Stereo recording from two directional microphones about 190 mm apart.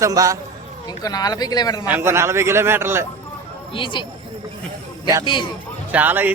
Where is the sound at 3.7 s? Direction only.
25° left (ahead or behind).